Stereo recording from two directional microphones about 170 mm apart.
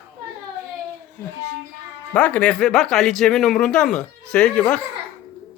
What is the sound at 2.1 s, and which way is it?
Speech, 10° left (ahead or behind).